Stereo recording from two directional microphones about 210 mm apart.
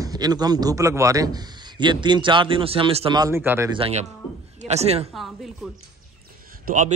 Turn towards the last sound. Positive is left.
turn(degrees=-40)  # may be behind; listen again after turning